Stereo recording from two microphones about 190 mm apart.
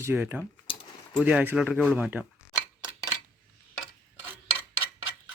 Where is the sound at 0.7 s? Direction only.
30° left (ahead or behind).